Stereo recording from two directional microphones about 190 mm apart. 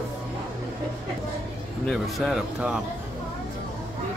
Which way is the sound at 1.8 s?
Centre (ahead or behind).